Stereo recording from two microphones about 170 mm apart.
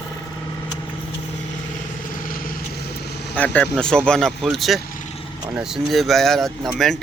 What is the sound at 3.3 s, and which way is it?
Speech, 10° left (ahead or behind).